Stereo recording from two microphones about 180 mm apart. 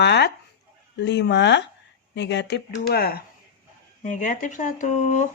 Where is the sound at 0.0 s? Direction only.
70° left (ahead or behind).